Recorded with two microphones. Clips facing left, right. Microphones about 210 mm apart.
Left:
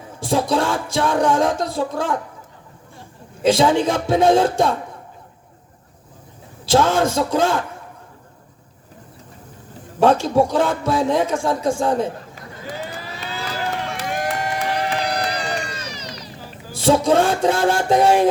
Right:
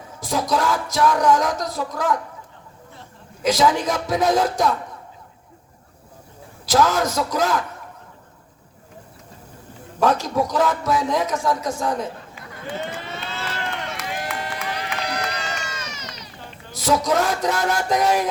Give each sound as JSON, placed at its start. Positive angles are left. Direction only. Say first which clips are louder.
{"t": 0.2, "sound": "a man's voice", "louder": "left 3 dB", "side_deg": 30}
{"t": 3.4, "sound": "a man's voice", "louder": "left 3 dB", "side_deg": 30}
{"t": 6.7, "sound": "a man's voice", "louder": "left 2 dB", "side_deg": 30}
{"t": 10.0, "sound": "a man's voice", "louder": "left 5 dB", "side_deg": 30}
{"t": 12.7, "sound": "run", "louder": "right 2 dB", "side_deg": 5}
{"t": 14.1, "sound": "run", "louder": "left 7 dB", "side_deg": 50}
{"t": 14.6, "sound": "run", "louder": "left 6 dB", "side_deg": 35}
{"t": 16.7, "sound": "a man's voice", "louder": "left 5 dB", "side_deg": 30}